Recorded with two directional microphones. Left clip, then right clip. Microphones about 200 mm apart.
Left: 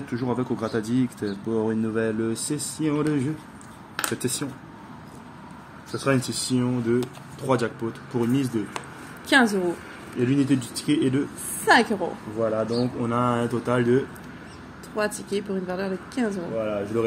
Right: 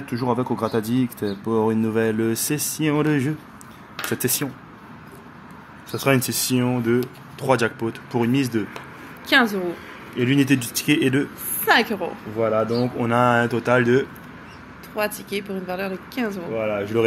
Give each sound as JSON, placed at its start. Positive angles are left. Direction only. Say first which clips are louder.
{"t": 0.2, "sound": "speech", "louder": "right 5 dB", "side_deg": -45}
{"t": 5.9, "sound": "speech", "louder": "right 4 dB", "side_deg": -45}
{"t": 9.3, "sound": "a woman's voice", "louder": "right 2 dB", "side_deg": 20}
{"t": 10.2, "sound": "speech", "louder": "right 3 dB", "side_deg": -45}
{"t": 11.6, "sound": "a woman's voice", "louder": "right 1 dB", "side_deg": 20}
{"t": 12.4, "sound": "speech", "louder": "right 4 dB", "side_deg": -60}
{"t": 13.0, "sound": "speech", "louder": "right 8 dB", "side_deg": -40}
{"t": 15.0, "sound": "a woman's voice", "louder": "right 1 dB", "side_deg": 25}
{"t": 16.6, "sound": "speech", "louder": "right 5 dB", "side_deg": -45}